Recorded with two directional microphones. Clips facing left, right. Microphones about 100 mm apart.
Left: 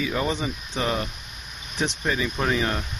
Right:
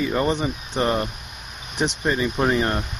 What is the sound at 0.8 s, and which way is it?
Speech, 35° right (ahead or behind).